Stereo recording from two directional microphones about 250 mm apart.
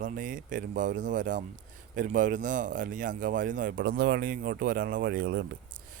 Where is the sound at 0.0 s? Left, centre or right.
Right.